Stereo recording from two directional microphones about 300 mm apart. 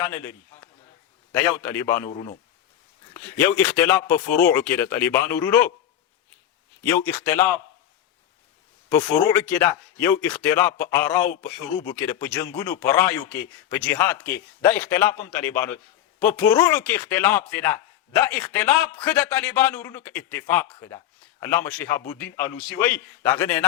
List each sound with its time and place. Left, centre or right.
0.1 s a man's voice: centre
1.4 s a man's voice: centre
2.0 s speech: left
3.3 s a man's voice: centre
6.8 s speech: centre
8.9 s a man's voice: centre